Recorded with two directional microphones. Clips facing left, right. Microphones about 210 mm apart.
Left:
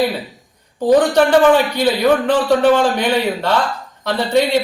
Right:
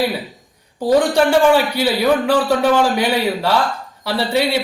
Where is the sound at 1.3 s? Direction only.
10° right (ahead or behind).